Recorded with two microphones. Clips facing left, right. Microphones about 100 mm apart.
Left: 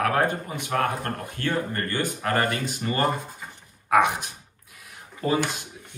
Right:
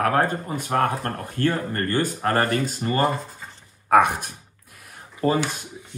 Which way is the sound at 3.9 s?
50° right (ahead or behind).